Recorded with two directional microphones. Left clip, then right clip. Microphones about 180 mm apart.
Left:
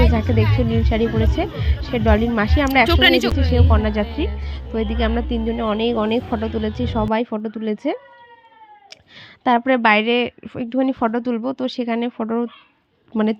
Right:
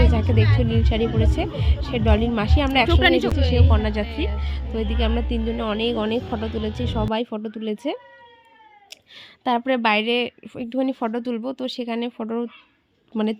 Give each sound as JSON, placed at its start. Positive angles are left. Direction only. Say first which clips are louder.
{"t": 0.1, "sound": "music", "louder": "left 3 dB", "side_deg": 0}
{"t": 0.5, "sound": "a woman's voice", "louder": "left 3 dB", "side_deg": 0}
{"t": 3.7, "sound": "a woman's voice", "louder": "left 4 dB", "side_deg": 0}